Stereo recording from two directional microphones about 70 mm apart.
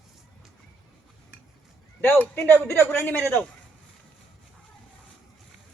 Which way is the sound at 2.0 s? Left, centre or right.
Left.